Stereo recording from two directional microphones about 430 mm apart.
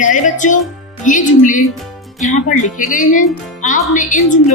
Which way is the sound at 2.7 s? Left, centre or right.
Centre.